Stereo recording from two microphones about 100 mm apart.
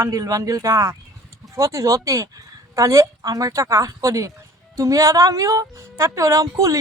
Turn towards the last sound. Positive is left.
turn(degrees=-30)  # may be behind; listen again after turning